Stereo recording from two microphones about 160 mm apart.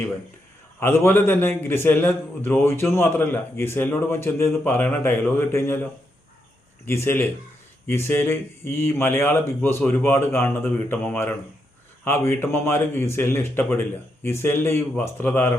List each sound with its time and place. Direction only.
0.8 s a man's voice: 15° left (ahead or behind)